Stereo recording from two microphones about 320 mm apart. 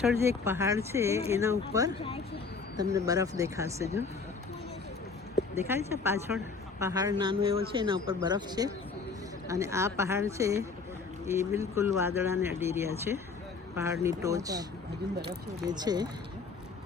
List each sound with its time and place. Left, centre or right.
0.0 s speech: centre
6.1 s speech: centre
15.6 s speech: centre